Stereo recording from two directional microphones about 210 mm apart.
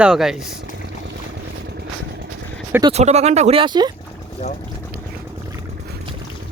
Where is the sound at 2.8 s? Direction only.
30° right (ahead or behind).